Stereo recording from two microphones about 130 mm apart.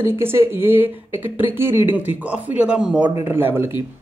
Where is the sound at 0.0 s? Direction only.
20° right (ahead or behind).